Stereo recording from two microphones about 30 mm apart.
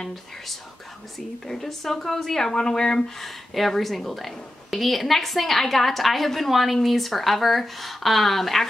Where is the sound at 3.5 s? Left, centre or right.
Centre.